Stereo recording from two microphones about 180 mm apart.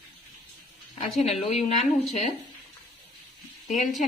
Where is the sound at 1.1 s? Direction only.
35° left (ahead or behind).